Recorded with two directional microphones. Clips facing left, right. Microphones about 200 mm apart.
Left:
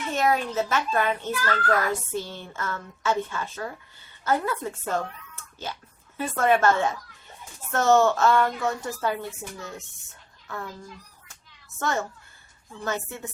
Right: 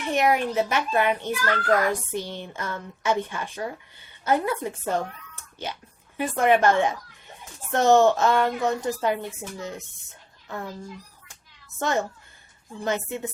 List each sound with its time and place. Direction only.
0.0 s a child's voice: 15° right (ahead or behind)
11.8 s a child's voice: 20° right (ahead or behind)